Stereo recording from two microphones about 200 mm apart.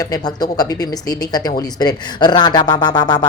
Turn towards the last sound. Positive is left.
turn(degrees=20)  # may be behind; listen again after turning